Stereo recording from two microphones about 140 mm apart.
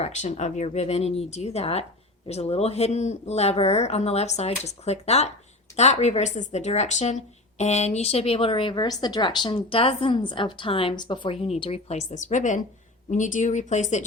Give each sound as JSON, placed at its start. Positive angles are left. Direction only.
{"t": 0.0, "sound": "speech", "side_deg": 55}